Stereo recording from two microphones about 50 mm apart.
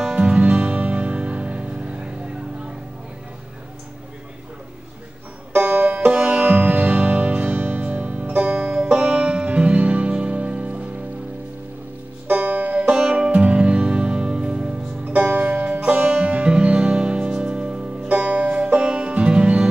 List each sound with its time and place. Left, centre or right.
0.1 s music: right
5.7 s music: right
12.3 s music: right
12.9 s music: centre